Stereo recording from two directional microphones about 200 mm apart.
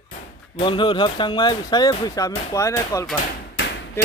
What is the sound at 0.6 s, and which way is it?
Speech, 25° left (ahead or behind).